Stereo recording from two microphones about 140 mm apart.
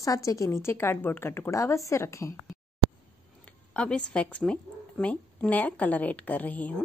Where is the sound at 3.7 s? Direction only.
5° left (ahead or behind).